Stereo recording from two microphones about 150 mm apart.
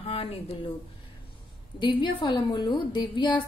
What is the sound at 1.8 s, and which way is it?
A woman's voice, 35° left (ahead or behind).